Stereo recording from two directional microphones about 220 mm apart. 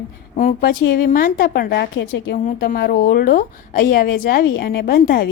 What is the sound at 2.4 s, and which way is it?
A woman's voice, 45° left (ahead or behind).